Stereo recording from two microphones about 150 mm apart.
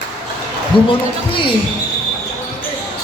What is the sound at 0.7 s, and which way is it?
Music, 35° left (ahead or behind).